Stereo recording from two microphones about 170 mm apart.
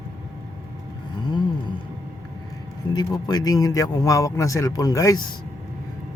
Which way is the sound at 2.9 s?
25° left (ahead or behind).